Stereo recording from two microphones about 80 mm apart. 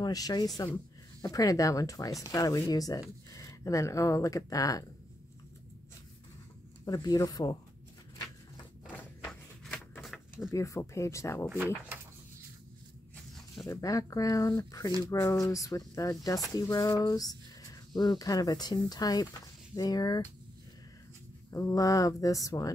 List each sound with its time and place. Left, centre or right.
0.0 s speech: left
6.9 s speech: left
9.7 s a sound: centre
10.5 s speech: left
13.7 s speech: left
15.0 s speech: left
21.5 s speech: left